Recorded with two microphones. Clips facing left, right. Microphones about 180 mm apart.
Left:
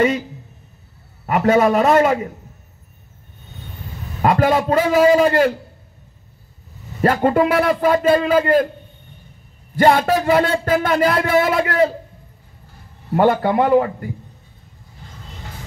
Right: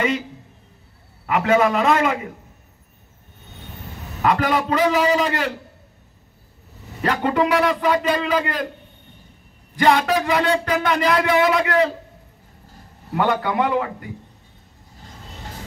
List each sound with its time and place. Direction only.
1.2 s speech: 45° left (ahead or behind)
4.2 s speech: 45° left (ahead or behind)
7.0 s speech: 45° left (ahead or behind)
9.8 s speech: 45° left (ahead or behind)
13.1 s a man's voice: 45° left (ahead or behind)